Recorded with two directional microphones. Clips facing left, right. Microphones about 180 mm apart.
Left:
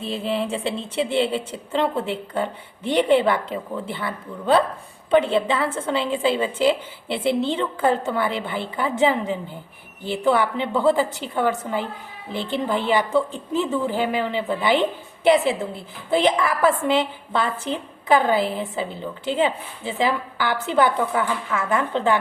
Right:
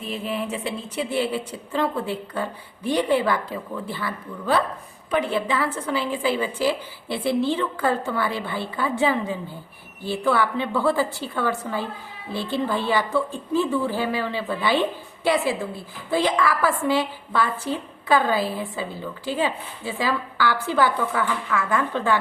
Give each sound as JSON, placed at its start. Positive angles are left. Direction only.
{"t": 0.0, "sound": "a woman's voice", "side_deg": 30}